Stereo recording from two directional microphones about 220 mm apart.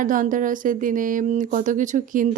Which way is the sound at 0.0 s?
35° right (ahead or behind).